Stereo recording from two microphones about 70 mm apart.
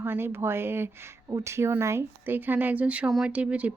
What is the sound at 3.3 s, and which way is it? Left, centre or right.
Speech, centre.